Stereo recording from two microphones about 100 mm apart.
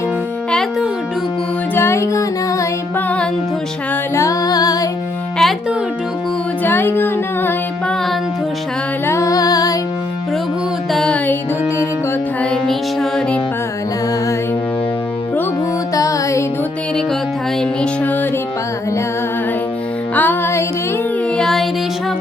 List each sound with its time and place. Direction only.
1.7 s music: 25° left (ahead or behind)
4.1 s music: 30° left (ahead or behind)
5.4 s music: centre (ahead or behind)
6.6 s music: 20° left (ahead or behind)
9.0 s music: 30° left (ahead or behind)
10.9 s music: 5° left (ahead or behind)
12.4 s music: 5° left (ahead or behind)
16.0 s music: 35° left (ahead or behind)
17.6 s music: 15° left (ahead or behind)
20.1 s music: 20° left (ahead or behind)
21.3 s music: 5° left (ahead or behind)